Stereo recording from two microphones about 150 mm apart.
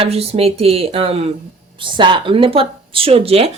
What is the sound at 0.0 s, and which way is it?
Speech, 40° right (ahead or behind).